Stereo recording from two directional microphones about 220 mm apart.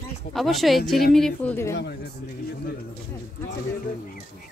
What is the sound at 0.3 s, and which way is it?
A woman's voice, centre (ahead or behind).